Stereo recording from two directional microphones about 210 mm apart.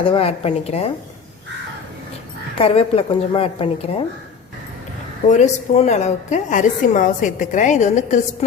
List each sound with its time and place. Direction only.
0.0 s a woman's voice: 25° left (ahead or behind)
2.6 s a woman's voice: 25° left (ahead or behind)
5.3 s a woman's voice: 35° left (ahead or behind)